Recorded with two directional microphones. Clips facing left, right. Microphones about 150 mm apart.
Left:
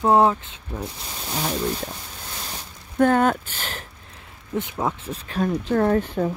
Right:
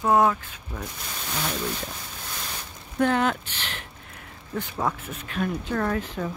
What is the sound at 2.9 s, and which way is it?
Speech, 45° left (ahead or behind).